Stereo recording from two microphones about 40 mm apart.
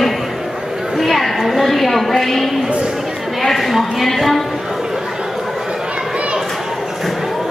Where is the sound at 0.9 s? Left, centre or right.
Centre.